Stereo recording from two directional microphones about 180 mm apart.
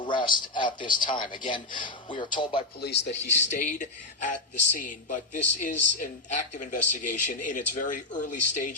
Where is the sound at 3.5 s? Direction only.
45° left (ahead or behind).